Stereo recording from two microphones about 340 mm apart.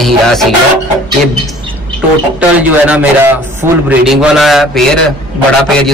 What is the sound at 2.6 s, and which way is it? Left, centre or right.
A man's voice, centre.